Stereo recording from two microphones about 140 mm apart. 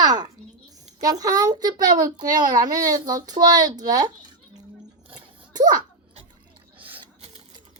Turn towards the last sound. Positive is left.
turn(degrees=-10)  # may be behind; listen again after turning